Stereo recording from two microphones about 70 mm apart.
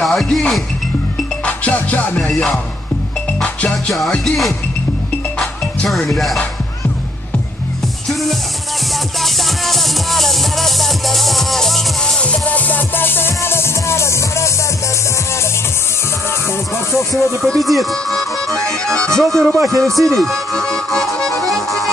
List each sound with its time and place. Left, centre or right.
0.0 s speech: centre
1.4 s music: left
4.1 s speech: centre
5.9 s speech: centre
8.1 s music: centre; by 14.5 s left
17.4 s speech: centre